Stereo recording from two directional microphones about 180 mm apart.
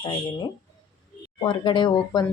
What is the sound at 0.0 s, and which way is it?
Speech, 25° left (ahead or behind).